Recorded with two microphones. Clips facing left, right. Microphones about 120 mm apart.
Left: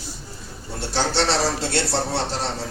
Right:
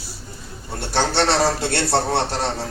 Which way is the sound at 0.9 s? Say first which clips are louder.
Right 3 dB; 55° right (ahead or behind).